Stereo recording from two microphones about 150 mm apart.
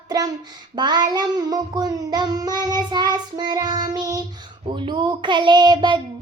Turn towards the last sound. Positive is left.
turn(degrees=-30)  # may be behind; listen again after turning